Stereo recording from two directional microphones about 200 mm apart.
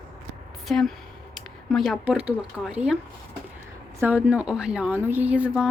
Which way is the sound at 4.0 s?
10° right (ahead or behind).